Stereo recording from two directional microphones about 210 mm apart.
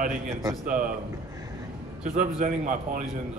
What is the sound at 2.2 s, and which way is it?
Speech, 40° right (ahead or behind).